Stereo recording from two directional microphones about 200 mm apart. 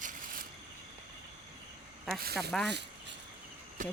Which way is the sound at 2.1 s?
50° right (ahead or behind).